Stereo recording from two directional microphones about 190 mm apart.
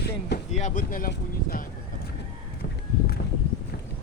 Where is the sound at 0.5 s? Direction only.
40° left (ahead or behind).